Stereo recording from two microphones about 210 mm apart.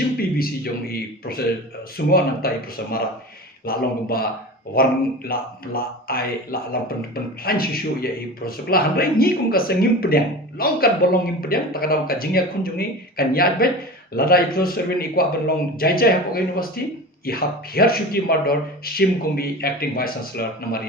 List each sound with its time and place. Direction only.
0.2 s speech: 45° left (ahead or behind)